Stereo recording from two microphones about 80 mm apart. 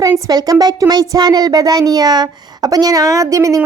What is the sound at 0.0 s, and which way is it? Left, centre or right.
A woman's voice, right.